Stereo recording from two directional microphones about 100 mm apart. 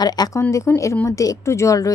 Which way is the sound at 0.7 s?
25° left (ahead or behind).